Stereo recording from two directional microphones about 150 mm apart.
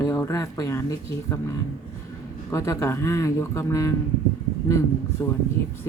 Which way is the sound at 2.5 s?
20° left (ahead or behind).